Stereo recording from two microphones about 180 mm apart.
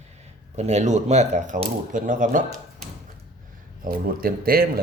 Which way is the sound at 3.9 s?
55° right (ahead or behind).